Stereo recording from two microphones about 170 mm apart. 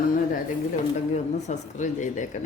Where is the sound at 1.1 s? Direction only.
45° left (ahead or behind).